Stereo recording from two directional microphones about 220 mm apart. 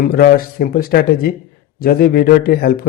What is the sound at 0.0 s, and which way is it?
Speech, 45° left (ahead or behind).